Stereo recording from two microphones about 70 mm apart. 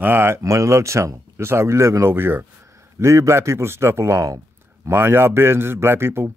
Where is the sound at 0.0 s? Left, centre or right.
Right.